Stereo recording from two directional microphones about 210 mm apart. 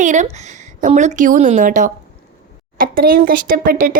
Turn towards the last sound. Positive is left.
turn(degrees=-45)  # may be behind; listen again after turning